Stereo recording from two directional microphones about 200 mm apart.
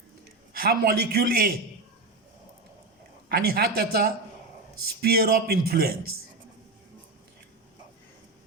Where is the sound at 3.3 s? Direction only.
50° right (ahead or behind).